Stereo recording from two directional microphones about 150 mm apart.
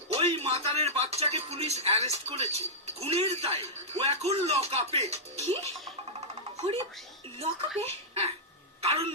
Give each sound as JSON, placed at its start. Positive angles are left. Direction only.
{"t": 0.1, "sound": "speech", "side_deg": -45}
{"t": 6.1, "sound": "music", "side_deg": -45}
{"t": 7.8, "sound": "giggle", "side_deg": -40}
{"t": 8.8, "sound": "speech", "side_deg": -40}